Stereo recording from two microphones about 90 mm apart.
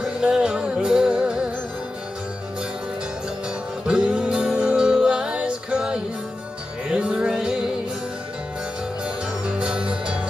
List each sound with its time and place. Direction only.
0.0 s music: 10° right (ahead or behind)
3.8 s music: 10° right (ahead or behind)
9.0 s music: 15° right (ahead or behind)